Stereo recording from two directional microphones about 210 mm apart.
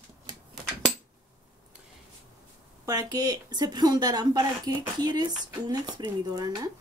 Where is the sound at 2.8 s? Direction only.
15° right (ahead or behind).